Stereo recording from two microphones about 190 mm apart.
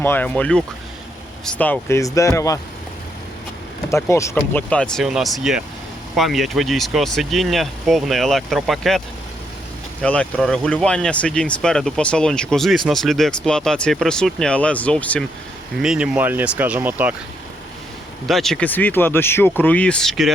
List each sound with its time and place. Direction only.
0.0 s speech: 10° left (ahead or behind)
3.9 s speech: 15° left (ahead or behind)
10.0 s speech: 5° left (ahead or behind)
15.8 s speech: 5° right (ahead or behind)
18.3 s speech: centre (ahead or behind)